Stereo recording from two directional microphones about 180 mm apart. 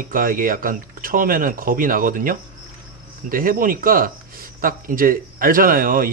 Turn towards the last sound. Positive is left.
turn(degrees=-50)  # may be behind; listen again after turning